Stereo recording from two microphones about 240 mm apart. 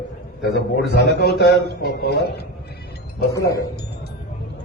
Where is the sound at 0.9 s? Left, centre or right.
Left.